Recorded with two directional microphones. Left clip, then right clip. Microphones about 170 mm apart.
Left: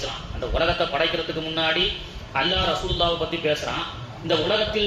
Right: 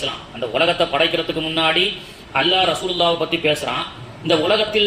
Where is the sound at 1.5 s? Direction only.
35° right (ahead or behind).